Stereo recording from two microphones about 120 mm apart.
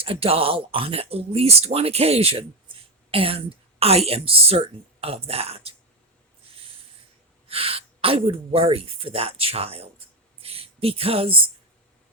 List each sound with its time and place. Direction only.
0.0 s a woman's voice: 50° right (ahead or behind)
7.4 s speech: 50° right (ahead or behind)